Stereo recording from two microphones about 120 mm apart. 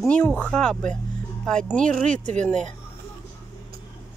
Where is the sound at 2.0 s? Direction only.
90° right.